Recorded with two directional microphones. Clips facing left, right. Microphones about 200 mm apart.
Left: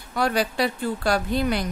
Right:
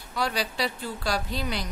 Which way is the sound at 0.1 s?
55° left (ahead or behind).